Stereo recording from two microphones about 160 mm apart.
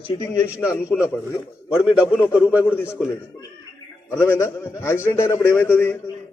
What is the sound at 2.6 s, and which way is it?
Speech, 15° left (ahead or behind).